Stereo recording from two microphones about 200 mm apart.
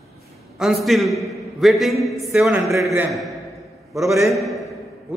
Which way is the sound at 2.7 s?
15° right (ahead or behind).